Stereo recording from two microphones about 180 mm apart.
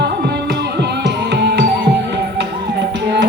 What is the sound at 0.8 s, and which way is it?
Music, 70° right (ahead or behind).